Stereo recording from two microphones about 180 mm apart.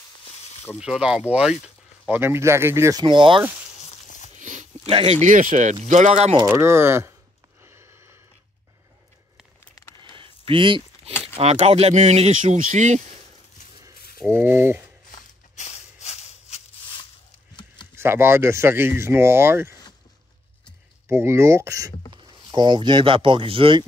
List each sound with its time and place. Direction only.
0.7 s speech: 5° right (ahead or behind); by 3.4 s 25° right (ahead or behind)
4.4 s a sound: 45° right (ahead or behind)
4.8 s speech: 30° right (ahead or behind)
5.2 s speech: 45° right (ahead or behind)
6.5 s speech: 15° right (ahead or behind)
7.6 s a sound: 15° right (ahead or behind)
9.8 s a sound: 20° left (ahead or behind)
10.1 s a sound: 30° right (ahead or behind)
11.3 s speech: 35° right (ahead or behind)
14.2 s speech: 10° right (ahead or behind)
15.0 s maraca: 40° left (ahead or behind)
17.9 s speech: 15° right (ahead or behind)
21.1 s speech: 15° right (ahead or behind)